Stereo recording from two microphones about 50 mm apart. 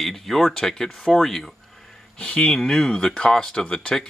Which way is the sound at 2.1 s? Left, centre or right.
Left.